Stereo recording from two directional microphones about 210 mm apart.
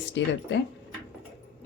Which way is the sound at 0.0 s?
55° left (ahead or behind).